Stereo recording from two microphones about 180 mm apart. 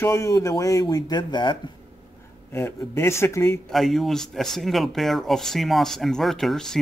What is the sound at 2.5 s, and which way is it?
A man's voice, 15° left (ahead or behind).